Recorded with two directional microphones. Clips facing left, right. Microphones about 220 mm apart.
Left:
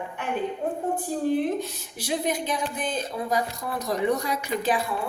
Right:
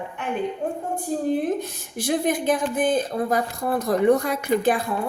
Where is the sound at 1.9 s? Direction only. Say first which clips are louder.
Right 5 dB; 50° right (ahead or behind).